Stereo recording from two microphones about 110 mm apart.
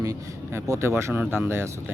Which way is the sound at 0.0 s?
30° right (ahead or behind).